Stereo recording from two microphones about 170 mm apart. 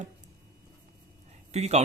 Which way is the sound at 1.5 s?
40° right (ahead or behind).